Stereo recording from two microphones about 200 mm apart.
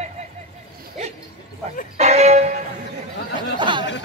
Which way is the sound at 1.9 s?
30° right (ahead or behind).